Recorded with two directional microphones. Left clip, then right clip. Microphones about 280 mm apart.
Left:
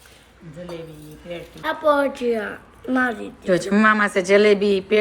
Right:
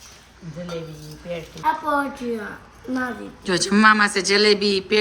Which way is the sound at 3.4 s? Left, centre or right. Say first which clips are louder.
Right 1 dB; centre.